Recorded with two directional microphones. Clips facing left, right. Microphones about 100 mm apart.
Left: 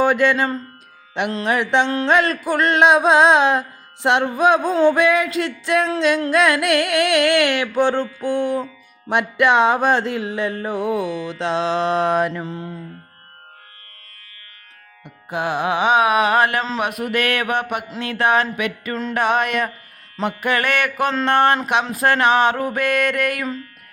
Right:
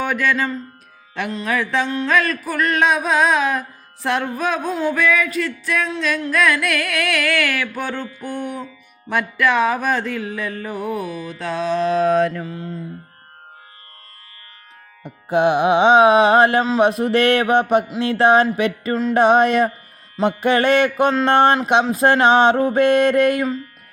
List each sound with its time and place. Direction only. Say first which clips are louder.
0.0 s a sound: left 4 dB; 30° left (ahead or behind)
1.7 s music: left 3 dB; 25° left (ahead or behind)
4.2 s a sound: left 6 dB; 25° left (ahead or behind)
5.0 s music: left 1 dB; 25° left (ahead or behind)
8.3 s music: left 7 dB; 90° left
9.0 s music: left 2 dB; 20° left (ahead or behind)
10.7 s music: left 3 dB; 90° left
12.0 s mantra: right 2 dB; 15° left (ahead or behind)
12.4 s music: even; 25° left (ahead or behind)
15.3 s mantra: right 6 dB; 20° right (ahead or behind)
18.5 s music: right 5 dB; 30° right (ahead or behind)
19.1 s mantra: right 6 dB; 25° right (ahead or behind)